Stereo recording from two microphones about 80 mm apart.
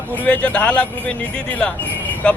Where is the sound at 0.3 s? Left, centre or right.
Centre.